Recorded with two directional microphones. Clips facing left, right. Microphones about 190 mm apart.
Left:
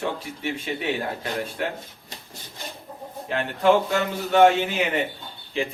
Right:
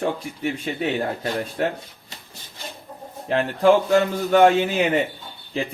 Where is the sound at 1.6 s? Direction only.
35° right (ahead or behind).